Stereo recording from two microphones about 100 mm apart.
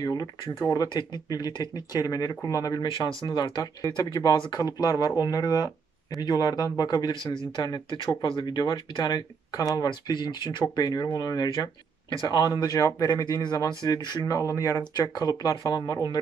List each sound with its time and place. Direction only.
0.0 s speech: 40° left (ahead or behind)